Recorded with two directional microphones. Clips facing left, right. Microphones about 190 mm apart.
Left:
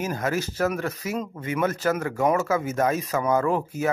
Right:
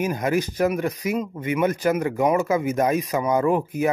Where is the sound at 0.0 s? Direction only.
15° right (ahead or behind).